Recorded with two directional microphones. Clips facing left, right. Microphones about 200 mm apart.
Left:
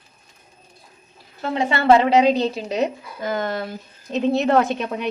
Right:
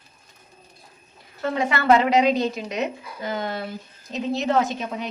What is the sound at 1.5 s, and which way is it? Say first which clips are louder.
Speech: left 3 dB; 25° left (ahead or behind).